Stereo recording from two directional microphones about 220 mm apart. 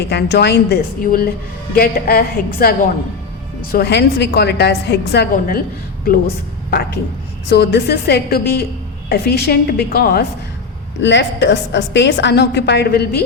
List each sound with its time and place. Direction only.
0.0 s a woman's voice: 50° left (ahead or behind)
6.7 s a woman's voice: 45° left (ahead or behind)